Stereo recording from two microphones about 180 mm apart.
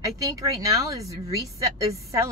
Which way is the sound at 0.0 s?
20° right (ahead or behind).